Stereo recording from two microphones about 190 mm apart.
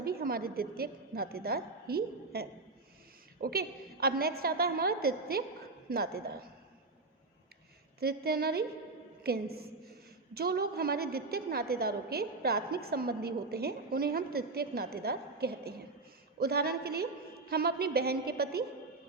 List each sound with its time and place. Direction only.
0.0 s a woman's voice: 55° right (ahead or behind)
7.9 s a woman's voice: 55° right (ahead or behind)